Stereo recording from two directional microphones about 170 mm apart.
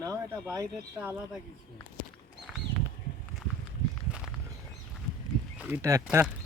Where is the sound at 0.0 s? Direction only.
20° right (ahead or behind).